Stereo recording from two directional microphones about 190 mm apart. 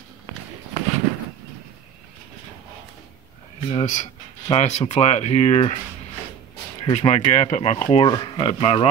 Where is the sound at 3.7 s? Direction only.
40° left (ahead or behind).